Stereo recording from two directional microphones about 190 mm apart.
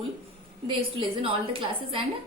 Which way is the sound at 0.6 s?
25° right (ahead or behind).